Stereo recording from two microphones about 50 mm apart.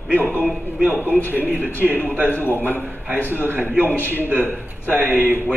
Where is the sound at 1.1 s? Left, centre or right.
Right.